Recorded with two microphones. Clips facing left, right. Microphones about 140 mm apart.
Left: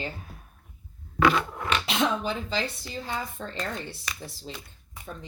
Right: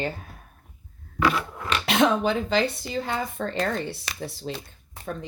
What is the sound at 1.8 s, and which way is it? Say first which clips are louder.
Speech: right 9 dB; 65° right (ahead or behind).